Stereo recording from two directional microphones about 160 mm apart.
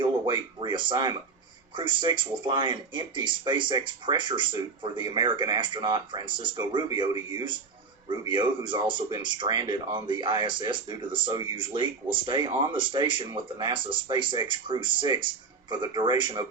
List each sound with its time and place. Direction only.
0.0 s speech: 30° right (ahead or behind)